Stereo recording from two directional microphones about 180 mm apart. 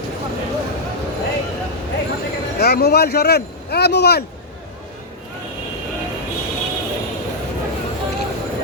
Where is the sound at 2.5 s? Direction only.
60° left (ahead or behind).